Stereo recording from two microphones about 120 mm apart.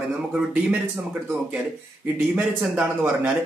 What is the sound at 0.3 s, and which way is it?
Speech, 10° right (ahead or behind).